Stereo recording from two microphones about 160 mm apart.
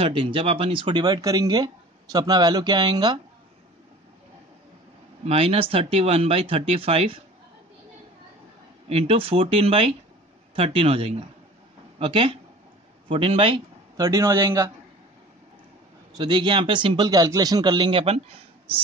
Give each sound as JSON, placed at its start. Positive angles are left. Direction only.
{"t": 0.0, "sound": "speech", "side_deg": -35}
{"t": 5.2, "sound": "speech", "side_deg": -40}
{"t": 8.8, "sound": "speech", "side_deg": -35}
{"t": 14.0, "sound": "speech", "side_deg": -20}
{"t": 16.2, "sound": "speech", "side_deg": -30}